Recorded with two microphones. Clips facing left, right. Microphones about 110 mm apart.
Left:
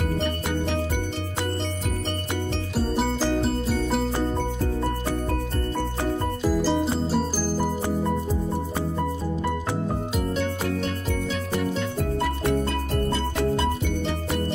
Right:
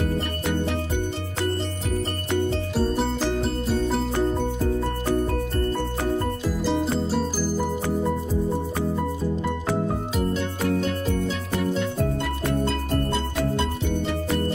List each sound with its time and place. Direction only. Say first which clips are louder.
6.6 s music: even; centre (ahead or behind)